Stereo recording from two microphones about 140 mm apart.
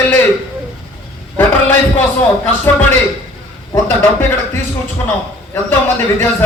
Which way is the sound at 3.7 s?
20° left (ahead or behind).